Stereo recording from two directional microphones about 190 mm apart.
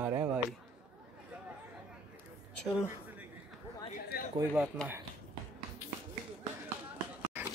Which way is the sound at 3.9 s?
50° left (ahead or behind).